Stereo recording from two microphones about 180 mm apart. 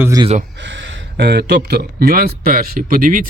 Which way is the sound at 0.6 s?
90° right.